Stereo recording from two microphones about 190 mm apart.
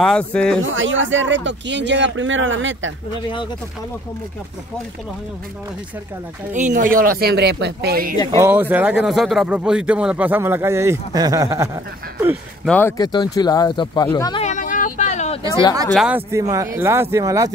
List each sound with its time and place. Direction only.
0.0 s speech: 5° left (ahead or behind)
0.7 s speech: 85° right
6.5 s speech: 40° right (ahead or behind)
8.4 s speech: 10° right (ahead or behind)
12.6 s speech: 10° left (ahead or behind)
12.9 s speech: 20° left (ahead or behind)
14.4 s a sound: 40° left (ahead or behind)
15.9 s speech: 5° right (ahead or behind)